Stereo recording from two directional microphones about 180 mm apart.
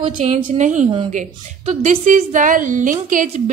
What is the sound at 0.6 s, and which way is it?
A woman's voice, 45° right (ahead or behind).